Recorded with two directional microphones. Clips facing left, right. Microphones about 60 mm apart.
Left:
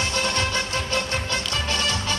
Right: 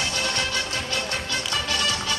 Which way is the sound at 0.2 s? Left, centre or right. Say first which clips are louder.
Left 2 dB; left.